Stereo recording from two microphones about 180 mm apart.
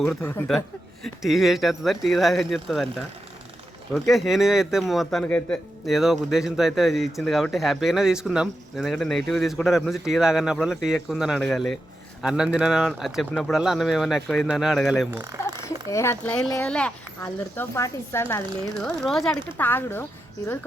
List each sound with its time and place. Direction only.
0.2 s speech: 10° left (ahead or behind)
4.1 s speech: centre (ahead or behind)
15.1 s speech: 15° right (ahead or behind)
15.9 s speech: 15° left (ahead or behind)
18.8 s speech: 5° left (ahead or behind)